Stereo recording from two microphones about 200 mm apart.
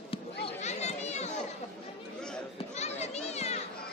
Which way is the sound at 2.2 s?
5° left (ahead or behind).